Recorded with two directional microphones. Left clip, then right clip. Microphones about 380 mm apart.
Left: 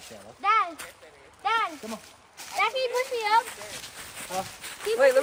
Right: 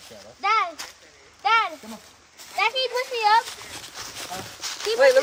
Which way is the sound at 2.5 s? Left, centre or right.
Right.